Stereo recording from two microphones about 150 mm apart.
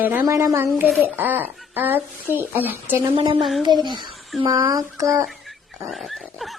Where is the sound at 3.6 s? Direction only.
30° right (ahead or behind).